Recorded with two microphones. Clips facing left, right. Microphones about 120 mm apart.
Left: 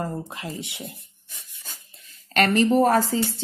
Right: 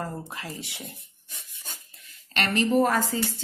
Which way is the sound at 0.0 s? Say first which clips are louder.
Left 4 dB; 20° left (ahead or behind).